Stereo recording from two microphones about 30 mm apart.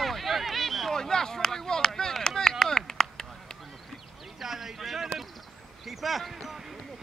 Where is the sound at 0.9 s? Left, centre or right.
Centre.